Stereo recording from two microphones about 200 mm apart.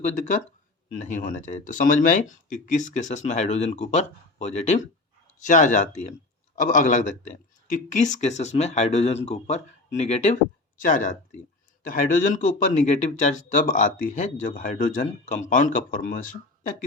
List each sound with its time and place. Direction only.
0.9 s speech: 40° left (ahead or behind)